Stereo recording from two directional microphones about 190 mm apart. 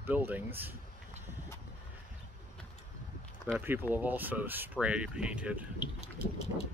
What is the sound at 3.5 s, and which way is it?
Speech, 10° right (ahead or behind).